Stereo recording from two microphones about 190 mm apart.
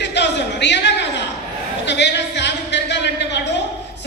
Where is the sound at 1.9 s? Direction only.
65° left (ahead or behind).